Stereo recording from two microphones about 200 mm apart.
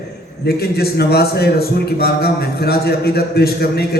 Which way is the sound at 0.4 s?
50° left (ahead or behind).